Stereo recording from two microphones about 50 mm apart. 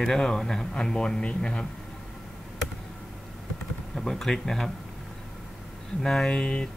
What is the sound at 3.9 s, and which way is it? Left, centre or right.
Speech, centre.